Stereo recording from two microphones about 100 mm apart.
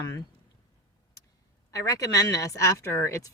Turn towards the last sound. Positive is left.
turn(degrees=30)  # may be behind; listen again after turning